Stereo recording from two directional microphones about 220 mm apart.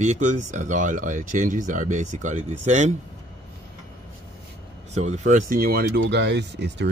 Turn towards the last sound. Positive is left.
turn(degrees=-50)  # may be behind; listen again after turning